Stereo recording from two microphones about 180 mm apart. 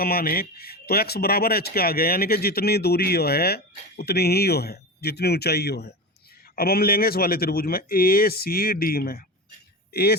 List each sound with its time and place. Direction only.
0.0 s speech: 60° left (ahead or behind)